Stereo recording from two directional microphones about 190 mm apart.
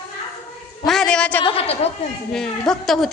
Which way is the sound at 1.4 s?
30° left (ahead or behind).